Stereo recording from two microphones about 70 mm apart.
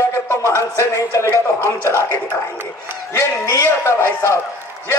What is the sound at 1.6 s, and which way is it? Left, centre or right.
Speech, left.